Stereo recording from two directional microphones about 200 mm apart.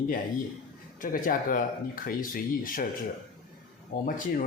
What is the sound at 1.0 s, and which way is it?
A man's voice, 45° left (ahead or behind).